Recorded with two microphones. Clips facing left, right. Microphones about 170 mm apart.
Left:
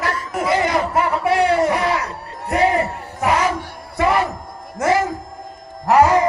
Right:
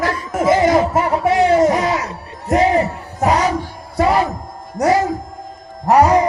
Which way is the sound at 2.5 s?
40° right (ahead or behind).